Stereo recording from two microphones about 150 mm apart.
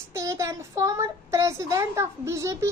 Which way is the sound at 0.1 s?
20° right (ahead or behind).